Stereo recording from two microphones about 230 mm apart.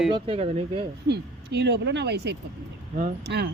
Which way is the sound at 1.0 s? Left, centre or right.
Right.